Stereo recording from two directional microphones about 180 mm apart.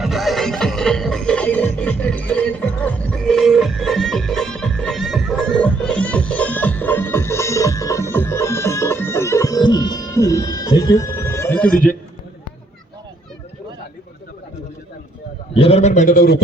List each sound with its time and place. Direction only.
0.0 s music: centre (ahead or behind)
15.5 s a man's voice: 35° left (ahead or behind); by 16.4 s 55° left (ahead or behind)